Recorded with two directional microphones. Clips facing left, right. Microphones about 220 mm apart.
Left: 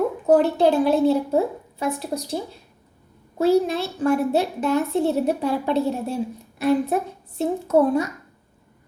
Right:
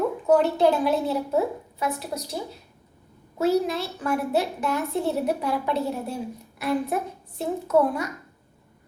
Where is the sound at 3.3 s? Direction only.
30° left (ahead or behind).